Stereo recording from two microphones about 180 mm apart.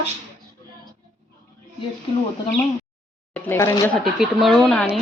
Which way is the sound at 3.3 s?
10° left (ahead or behind).